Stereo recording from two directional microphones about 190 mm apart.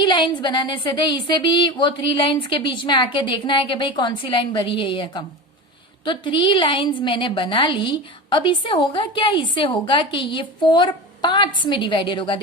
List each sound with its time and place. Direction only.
0.0 s a woman's voice: 25° left (ahead or behind)